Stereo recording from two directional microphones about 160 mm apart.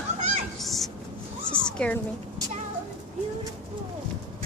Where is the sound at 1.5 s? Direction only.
5° left (ahead or behind).